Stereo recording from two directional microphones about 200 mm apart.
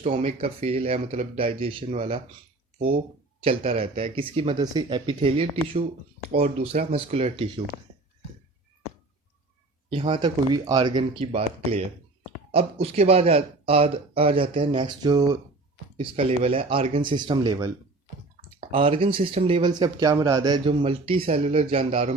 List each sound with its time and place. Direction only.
0.0 s speech: 35° right (ahead or behind)
3.4 s speech: 30° right (ahead or behind)
9.9 s speech: 25° right (ahead or behind)
18.7 s speech: 25° right (ahead or behind)